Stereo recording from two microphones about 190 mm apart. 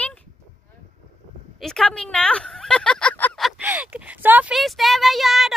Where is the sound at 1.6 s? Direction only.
Centre (ahead or behind).